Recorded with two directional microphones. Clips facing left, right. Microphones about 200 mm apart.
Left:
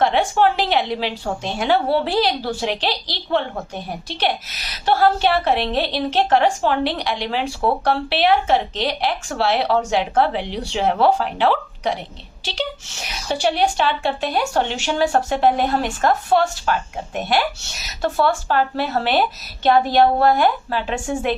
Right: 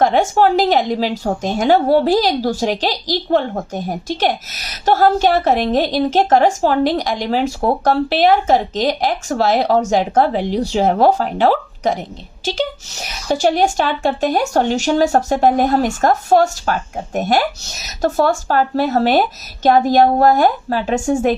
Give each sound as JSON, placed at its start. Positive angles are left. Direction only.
{"t": 0.0, "sound": "a woman's voice", "side_deg": -45}